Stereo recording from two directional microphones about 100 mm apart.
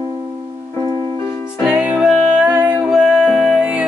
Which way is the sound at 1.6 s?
10° right (ahead or behind).